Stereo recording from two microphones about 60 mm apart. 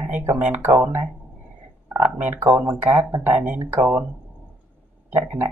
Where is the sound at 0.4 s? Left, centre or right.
Right.